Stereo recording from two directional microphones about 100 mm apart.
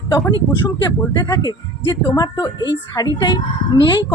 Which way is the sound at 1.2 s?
45° left (ahead or behind).